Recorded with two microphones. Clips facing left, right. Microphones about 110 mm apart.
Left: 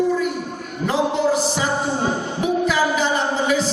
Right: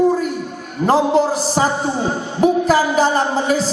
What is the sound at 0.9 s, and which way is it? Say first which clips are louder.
A man's voice: right 4 dB; 40° right (ahead or behind).